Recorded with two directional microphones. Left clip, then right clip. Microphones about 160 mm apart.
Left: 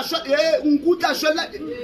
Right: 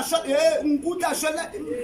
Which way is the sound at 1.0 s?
20° right (ahead or behind).